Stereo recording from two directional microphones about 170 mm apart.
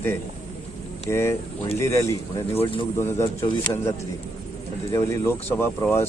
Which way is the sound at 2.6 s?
30° left (ahead or behind).